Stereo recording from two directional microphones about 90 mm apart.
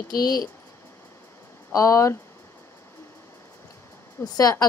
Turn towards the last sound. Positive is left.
turn(degrees=45)  # may be behind; listen again after turning